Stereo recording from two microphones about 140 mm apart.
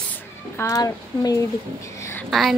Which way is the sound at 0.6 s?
25° left (ahead or behind).